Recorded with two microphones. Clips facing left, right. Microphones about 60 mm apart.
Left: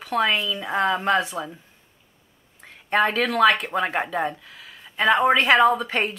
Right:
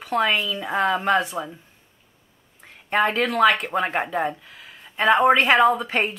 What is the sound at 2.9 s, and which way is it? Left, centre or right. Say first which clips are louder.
Speech: even; centre.